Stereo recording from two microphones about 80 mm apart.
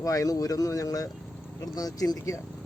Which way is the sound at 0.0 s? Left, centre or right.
Left.